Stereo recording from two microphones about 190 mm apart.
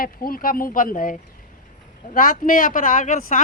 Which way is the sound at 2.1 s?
45° left (ahead or behind).